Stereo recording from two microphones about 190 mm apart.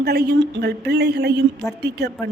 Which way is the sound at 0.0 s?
60° right (ahead or behind).